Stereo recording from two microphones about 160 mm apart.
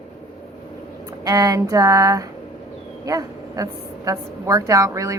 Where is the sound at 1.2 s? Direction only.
20° right (ahead or behind).